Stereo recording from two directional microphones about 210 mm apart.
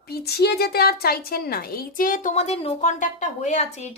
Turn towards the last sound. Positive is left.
turn(degrees=30)  # may be behind; listen again after turning